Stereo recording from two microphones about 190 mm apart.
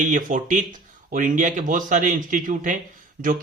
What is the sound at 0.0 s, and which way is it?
Speech, 40° right (ahead or behind).